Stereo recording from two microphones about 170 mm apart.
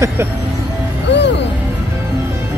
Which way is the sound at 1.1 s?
90° left.